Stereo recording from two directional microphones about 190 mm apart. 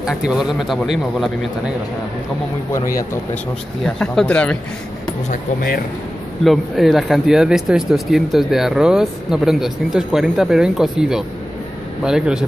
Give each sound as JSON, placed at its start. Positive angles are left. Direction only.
{"t": 0.3, "sound": "speech", "side_deg": -5}
{"t": 3.8, "sound": "speech", "side_deg": 5}
{"t": 5.3, "sound": "speech", "side_deg": 50}
{"t": 6.4, "sound": "speech", "side_deg": 0}